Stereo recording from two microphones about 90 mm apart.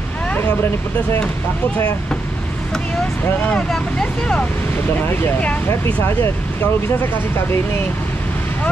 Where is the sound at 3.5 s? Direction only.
10° left (ahead or behind).